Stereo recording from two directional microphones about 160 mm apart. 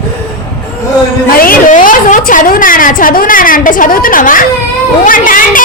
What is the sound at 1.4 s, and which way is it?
A woman's voice, 60° left (ahead or behind).